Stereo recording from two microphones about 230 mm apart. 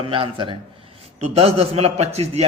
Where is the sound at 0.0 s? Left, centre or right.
Right.